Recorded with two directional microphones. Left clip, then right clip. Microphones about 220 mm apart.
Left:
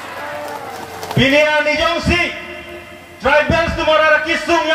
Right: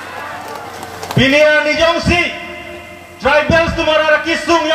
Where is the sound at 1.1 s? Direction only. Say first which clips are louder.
Right 3 dB; 45° right (ahead or behind).